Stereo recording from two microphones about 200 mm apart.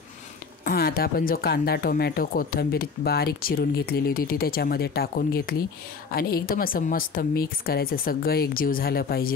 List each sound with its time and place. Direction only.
0.7 s speech: 50° left (ahead or behind)